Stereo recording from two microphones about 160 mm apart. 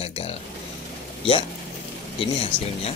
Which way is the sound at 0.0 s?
40° left (ahead or behind).